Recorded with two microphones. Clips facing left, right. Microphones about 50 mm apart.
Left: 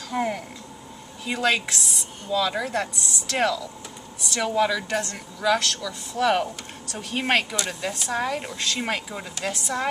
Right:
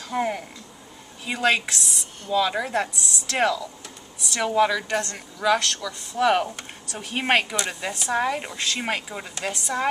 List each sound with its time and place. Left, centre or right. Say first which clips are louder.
0.1 s speech: right 1 dB; centre
2.2 s speech: right 2 dB; centre
3.3 s speech: right 1 dB; centre